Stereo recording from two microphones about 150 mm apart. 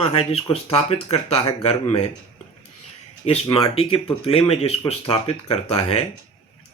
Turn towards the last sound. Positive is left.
turn(degrees=40)  # may be behind; listen again after turning